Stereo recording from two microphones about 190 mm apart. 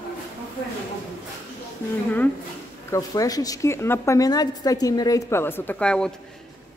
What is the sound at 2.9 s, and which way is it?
A woman's voice, 20° left (ahead or behind).